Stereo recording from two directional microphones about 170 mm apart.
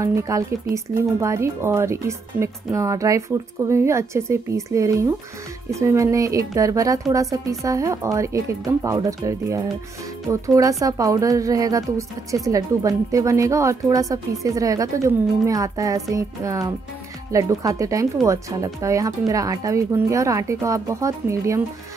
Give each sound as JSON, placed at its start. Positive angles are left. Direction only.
{"t": 0.0, "sound": "a woman's voice", "side_deg": -15}